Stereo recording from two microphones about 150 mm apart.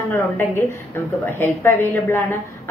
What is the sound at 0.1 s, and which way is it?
Speech, 20° left (ahead or behind).